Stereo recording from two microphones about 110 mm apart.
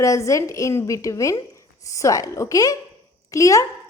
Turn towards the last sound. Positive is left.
turn(degrees=30)  # may be behind; listen again after turning